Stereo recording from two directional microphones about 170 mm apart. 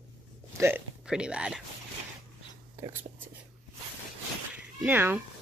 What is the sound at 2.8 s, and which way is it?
Speech, 15° right (ahead or behind).